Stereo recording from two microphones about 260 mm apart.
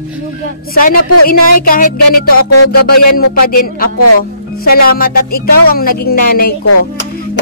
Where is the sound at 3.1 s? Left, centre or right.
Left.